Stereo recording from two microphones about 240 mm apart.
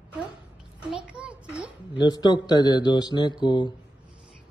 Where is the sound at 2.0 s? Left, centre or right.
Centre.